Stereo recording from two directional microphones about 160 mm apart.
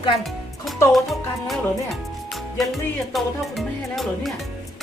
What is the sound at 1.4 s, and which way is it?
Music, centre (ahead or behind).